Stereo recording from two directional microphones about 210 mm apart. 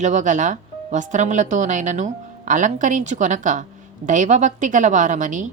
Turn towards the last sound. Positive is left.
turn(degrees=-35)  # may be behind; listen again after turning